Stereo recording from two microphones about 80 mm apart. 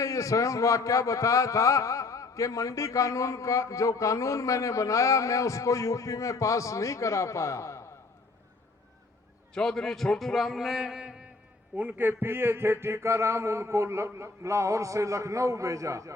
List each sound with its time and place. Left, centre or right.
0.0 s a man's voice: left
9.6 s a man's voice: centre
11.8 s speech: right